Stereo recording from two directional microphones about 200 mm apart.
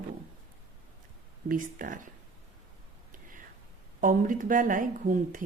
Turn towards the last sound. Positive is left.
turn(degrees=-40)  # may be behind; listen again after turning